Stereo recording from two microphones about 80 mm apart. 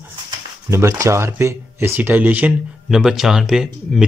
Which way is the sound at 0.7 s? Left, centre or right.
Right.